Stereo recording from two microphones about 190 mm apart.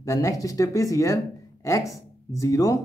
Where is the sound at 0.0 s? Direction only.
15° left (ahead or behind).